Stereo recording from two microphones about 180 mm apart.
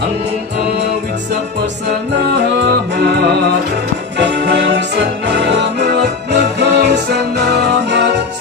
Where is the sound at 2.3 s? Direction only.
65° right (ahead or behind).